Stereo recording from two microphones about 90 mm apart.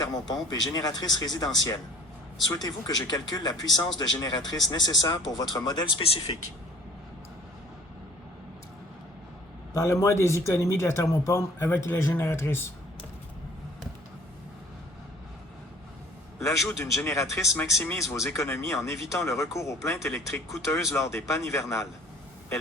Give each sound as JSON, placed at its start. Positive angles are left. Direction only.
{"t": 0.0, "sound": "speech", "side_deg": 45}
{"t": 2.5, "sound": "speech", "side_deg": 45}
{"t": 6.0, "sound": "speech", "side_deg": 90}
{"t": 9.7, "sound": "speech", "side_deg": 30}
{"t": 16.4, "sound": "speech", "side_deg": 35}